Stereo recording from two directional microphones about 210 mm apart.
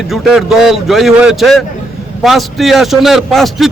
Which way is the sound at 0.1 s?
Centre (ahead or behind).